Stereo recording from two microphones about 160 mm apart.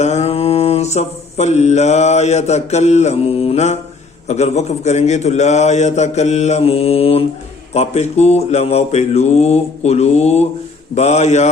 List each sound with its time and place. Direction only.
0.0 s mantra: 40° left (ahead or behind)
4.3 s a man's voice: 45° left (ahead or behind)